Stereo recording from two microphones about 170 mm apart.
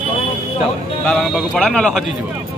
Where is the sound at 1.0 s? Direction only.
5° left (ahead or behind).